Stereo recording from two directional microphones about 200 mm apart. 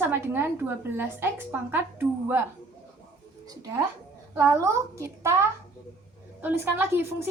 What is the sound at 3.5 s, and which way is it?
A woman's voice, 20° right (ahead or behind).